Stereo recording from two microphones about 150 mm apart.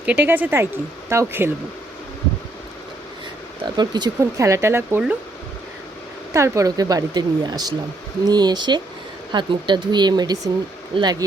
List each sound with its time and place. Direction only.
0.0 s speech: 10° right (ahead or behind)
3.8 s speech: 30° right (ahead or behind); by 5.1 s 15° right (ahead or behind)
6.3 s speech: 20° right (ahead or behind)